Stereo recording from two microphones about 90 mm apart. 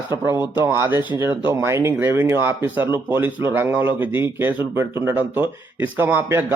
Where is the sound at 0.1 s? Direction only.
25° right (ahead or behind).